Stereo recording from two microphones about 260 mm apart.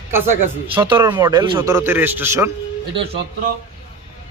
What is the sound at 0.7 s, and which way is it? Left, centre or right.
A man's voice, centre.